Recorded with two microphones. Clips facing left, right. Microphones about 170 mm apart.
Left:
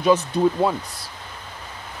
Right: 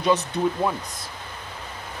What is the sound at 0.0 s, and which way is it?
Speech, 30° left (ahead or behind).